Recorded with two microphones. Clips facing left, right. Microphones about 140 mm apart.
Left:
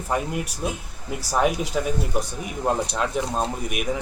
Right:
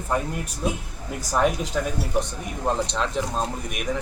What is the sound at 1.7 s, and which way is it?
A man's voice, 10° left (ahead or behind).